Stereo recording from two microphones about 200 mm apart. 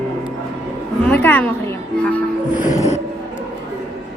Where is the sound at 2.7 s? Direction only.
35° left (ahead or behind).